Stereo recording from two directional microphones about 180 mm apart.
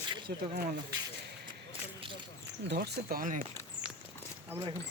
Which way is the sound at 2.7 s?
65° right (ahead or behind).